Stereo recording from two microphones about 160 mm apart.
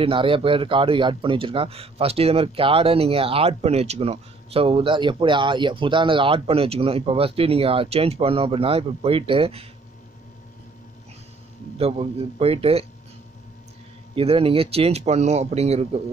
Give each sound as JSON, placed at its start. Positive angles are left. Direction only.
{"t": 0.0, "sound": "speech", "side_deg": -35}
{"t": 11.8, "sound": "speech", "side_deg": -40}
{"t": 14.1, "sound": "speech", "side_deg": -35}